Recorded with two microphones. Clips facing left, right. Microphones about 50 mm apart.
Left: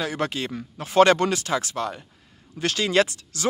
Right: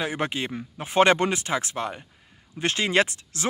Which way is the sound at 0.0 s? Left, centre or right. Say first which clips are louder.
Left 1 dB; right.